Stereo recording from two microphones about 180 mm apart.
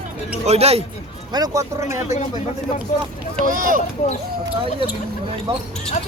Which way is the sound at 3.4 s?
50° right (ahead or behind).